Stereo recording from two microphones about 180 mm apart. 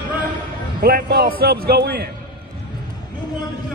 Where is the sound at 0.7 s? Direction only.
55° right (ahead or behind).